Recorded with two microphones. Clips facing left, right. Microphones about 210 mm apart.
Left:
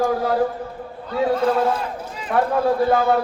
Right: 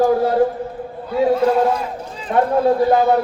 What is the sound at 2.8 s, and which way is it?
Speech, 20° right (ahead or behind).